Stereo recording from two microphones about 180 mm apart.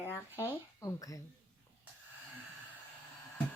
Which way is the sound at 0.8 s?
20° left (ahead or behind).